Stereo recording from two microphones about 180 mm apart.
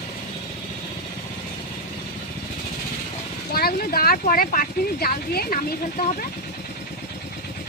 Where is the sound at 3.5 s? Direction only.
55° left (ahead or behind).